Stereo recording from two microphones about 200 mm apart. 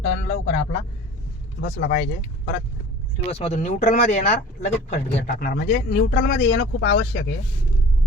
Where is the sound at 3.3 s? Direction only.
30° left (ahead or behind).